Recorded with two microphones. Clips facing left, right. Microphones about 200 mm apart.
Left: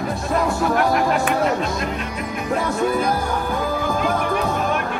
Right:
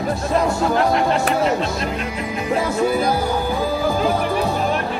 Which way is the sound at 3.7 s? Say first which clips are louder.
Right 3 dB; 30° right (ahead or behind).